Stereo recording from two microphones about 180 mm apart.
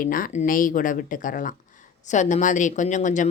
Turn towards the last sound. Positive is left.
turn(degrees=45)  # may be behind; listen again after turning